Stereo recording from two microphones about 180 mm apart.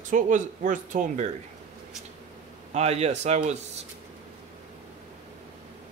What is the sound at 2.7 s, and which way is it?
A man's voice, 35° right (ahead or behind).